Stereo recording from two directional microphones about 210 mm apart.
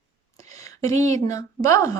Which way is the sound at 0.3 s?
15° left (ahead or behind).